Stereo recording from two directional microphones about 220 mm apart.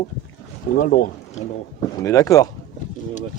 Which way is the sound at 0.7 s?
40° left (ahead or behind).